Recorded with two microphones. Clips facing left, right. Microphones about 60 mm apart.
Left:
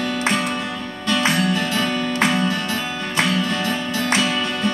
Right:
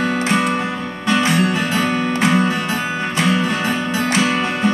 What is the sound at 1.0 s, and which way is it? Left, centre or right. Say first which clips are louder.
Music: right 3 dB; right.